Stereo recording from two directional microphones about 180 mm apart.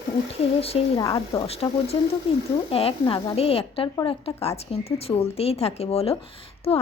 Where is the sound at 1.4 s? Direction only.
35° left (ahead or behind).